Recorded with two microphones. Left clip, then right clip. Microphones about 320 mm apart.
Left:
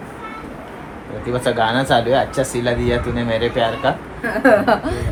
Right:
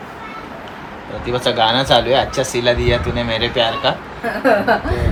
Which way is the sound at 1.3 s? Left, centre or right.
Centre.